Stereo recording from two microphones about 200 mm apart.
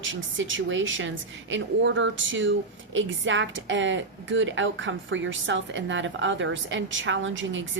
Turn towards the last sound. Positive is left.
turn(degrees=-70)  # may be behind; listen again after turning